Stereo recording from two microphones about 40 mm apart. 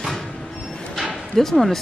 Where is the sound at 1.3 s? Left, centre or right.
Centre.